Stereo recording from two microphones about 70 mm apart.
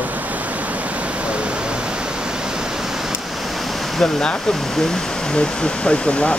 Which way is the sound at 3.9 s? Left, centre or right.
Centre.